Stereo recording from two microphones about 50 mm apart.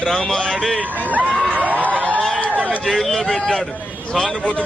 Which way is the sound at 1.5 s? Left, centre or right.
Right.